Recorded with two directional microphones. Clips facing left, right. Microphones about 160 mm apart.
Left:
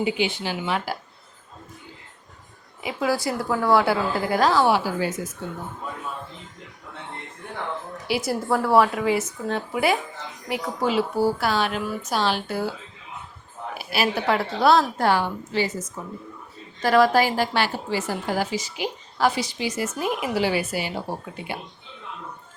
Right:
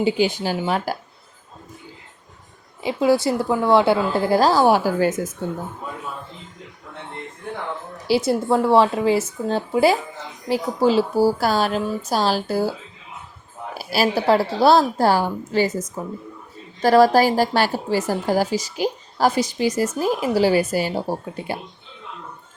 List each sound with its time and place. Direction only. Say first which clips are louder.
0.0 s a woman's voice: right 5 dB; 40° right (ahead or behind)
2.8 s a woman's voice: right 6 dB; 25° right (ahead or behind); by 5.3 s 45° right (ahead or behind)
8.0 s a woman's voice: right 6 dB; 25° right (ahead or behind)
13.7 s a woman's voice: right 4 dB; 35° right (ahead or behind)